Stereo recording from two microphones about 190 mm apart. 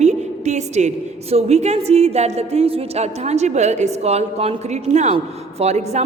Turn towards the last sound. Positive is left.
turn(degrees=-35)  # may be behind; listen again after turning